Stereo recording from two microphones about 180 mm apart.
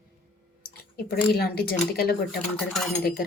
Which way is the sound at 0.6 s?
60° left (ahead or behind).